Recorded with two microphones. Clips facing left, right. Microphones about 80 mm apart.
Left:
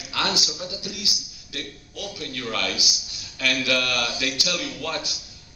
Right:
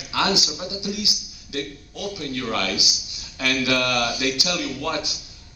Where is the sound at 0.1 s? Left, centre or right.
Centre.